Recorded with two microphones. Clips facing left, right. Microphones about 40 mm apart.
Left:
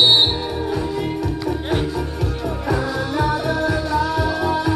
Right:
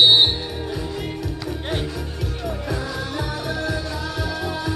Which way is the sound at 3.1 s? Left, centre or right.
Left.